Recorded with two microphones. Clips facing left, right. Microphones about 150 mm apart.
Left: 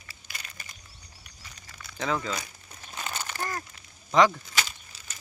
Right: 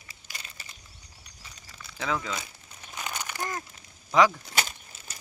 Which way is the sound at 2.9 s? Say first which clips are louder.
Even; 15° right (ahead or behind).